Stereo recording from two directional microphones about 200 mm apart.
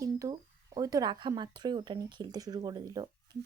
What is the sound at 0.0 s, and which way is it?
Speech, 15° right (ahead or behind).